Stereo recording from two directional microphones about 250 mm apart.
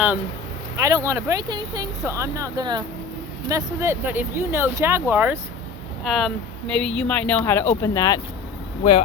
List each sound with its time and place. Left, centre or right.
0.8 s speech: centre; by 9.0 s left